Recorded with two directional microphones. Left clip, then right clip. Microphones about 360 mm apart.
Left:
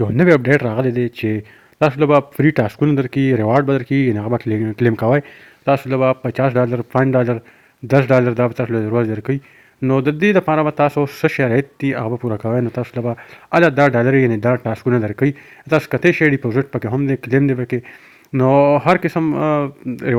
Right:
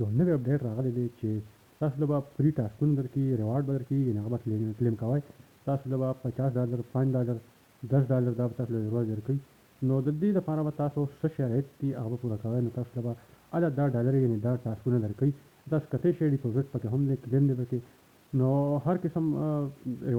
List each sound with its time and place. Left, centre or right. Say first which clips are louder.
0.0 s speech: left 16 dB; left